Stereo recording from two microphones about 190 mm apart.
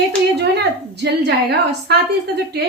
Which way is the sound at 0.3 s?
60° right (ahead or behind).